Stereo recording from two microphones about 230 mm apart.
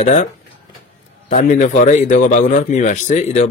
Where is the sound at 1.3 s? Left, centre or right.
Left.